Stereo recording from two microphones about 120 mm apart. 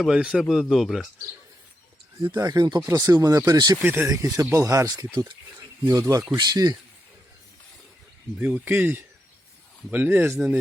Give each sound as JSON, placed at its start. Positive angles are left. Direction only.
{"t": 0.0, "sound": "speech", "side_deg": -5}
{"t": 2.2, "sound": "speech", "side_deg": -30}
{"t": 8.4, "sound": "speech", "side_deg": -15}